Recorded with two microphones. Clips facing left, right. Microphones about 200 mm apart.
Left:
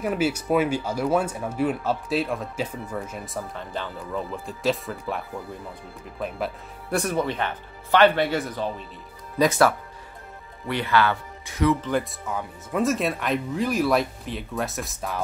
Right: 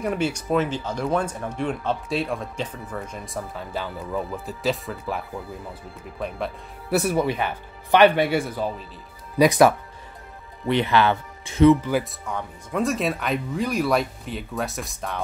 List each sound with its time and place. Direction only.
0.0 s speech: 5° left (ahead or behind)
9.4 s speech: 15° right (ahead or behind)
11.8 s speech: 5° right (ahead or behind)